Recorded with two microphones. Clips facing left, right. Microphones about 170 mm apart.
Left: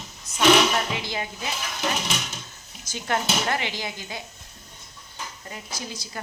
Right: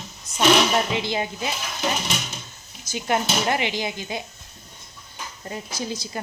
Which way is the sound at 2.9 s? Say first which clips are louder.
Right 3 dB; 15° right (ahead or behind).